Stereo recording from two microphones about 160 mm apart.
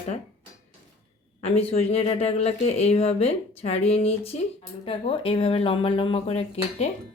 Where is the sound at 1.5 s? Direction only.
40° left (ahead or behind).